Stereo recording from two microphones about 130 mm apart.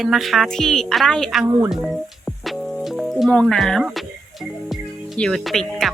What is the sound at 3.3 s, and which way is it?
Speech, 5° left (ahead or behind).